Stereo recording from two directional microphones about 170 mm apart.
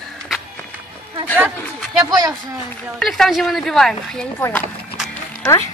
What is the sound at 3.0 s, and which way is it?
A woman's voice, centre (ahead or behind).